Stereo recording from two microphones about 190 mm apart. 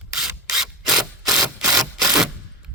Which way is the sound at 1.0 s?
20° right (ahead or behind).